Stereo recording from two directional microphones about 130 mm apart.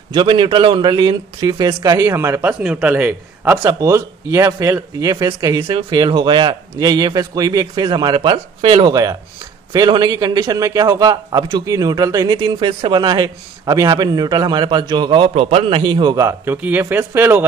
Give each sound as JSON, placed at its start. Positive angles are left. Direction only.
{"t": 0.1, "sound": "a man's voice", "side_deg": -40}
{"t": 3.6, "sound": "speech", "side_deg": -25}
{"t": 5.6, "sound": "speech", "side_deg": -45}
{"t": 5.9, "sound": "a man's voice", "side_deg": -35}
{"t": 9.7, "sound": "a man's voice", "side_deg": -30}
{"t": 12.4, "sound": "a man's voice", "side_deg": -40}
{"t": 16.3, "sound": "speech", "side_deg": -15}